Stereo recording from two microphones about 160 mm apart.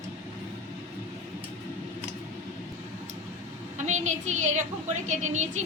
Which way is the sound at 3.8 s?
50° right (ahead or behind).